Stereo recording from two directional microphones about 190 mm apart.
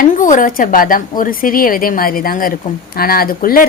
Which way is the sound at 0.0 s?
45° left (ahead or behind).